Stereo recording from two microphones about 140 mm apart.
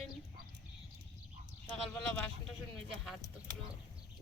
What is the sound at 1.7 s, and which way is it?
Speech, 10° left (ahead or behind).